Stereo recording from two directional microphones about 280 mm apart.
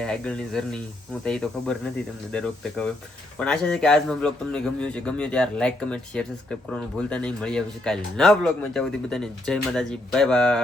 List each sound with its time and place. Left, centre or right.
0.0 s speech: centre